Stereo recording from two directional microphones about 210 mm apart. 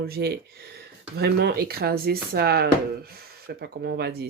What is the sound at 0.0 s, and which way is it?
Speech, 50° right (ahead or behind).